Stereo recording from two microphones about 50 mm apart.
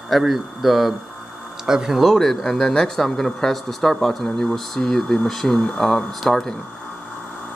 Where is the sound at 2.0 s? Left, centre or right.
Centre.